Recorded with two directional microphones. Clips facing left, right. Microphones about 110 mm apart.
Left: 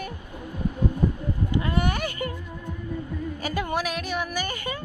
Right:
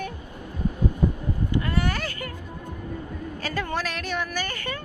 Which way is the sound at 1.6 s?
20° left (ahead or behind).